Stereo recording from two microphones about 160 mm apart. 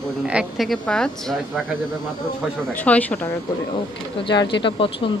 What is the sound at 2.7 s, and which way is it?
Speech, 10° left (ahead or behind).